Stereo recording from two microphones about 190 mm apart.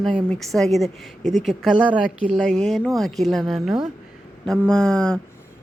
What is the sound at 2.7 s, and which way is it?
Speech, centre (ahead or behind).